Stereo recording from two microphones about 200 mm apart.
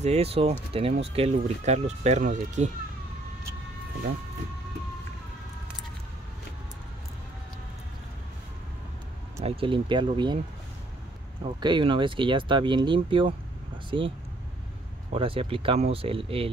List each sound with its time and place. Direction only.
0.0 s speech: 30° right (ahead or behind)
9.4 s speech: 30° right (ahead or behind)
11.4 s speech: 25° right (ahead or behind)
15.1 s speech: 25° right (ahead or behind)